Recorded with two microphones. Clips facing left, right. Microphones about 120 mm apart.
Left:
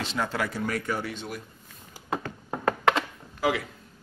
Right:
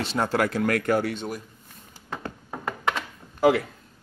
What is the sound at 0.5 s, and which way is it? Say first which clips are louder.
Speech: right 7 dB; 70° right (ahead or behind).